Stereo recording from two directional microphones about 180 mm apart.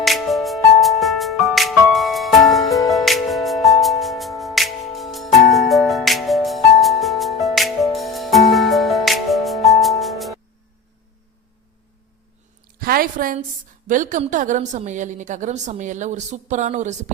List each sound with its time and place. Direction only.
0.0 s music: centre (ahead or behind)
12.8 s a sound: 55° right (ahead or behind)
13.9 s a woman's voice: 45° right (ahead or behind)